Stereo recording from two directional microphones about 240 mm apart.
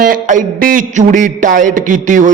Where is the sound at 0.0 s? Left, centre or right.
Right.